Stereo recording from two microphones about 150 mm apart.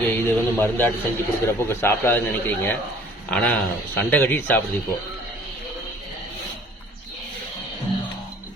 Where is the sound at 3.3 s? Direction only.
10° left (ahead or behind).